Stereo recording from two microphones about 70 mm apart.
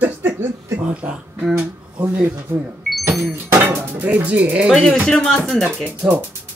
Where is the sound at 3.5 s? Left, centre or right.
Right.